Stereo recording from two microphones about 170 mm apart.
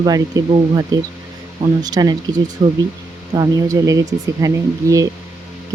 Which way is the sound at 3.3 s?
20° right (ahead or behind).